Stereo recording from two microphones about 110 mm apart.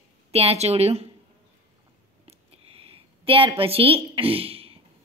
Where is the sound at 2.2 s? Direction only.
65° right (ahead or behind).